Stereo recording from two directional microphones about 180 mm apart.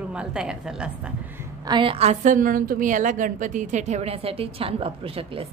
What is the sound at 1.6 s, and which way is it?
A woman's voice, 25° right (ahead or behind).